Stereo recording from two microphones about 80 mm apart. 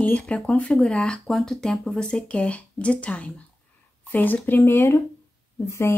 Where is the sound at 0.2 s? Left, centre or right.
Centre.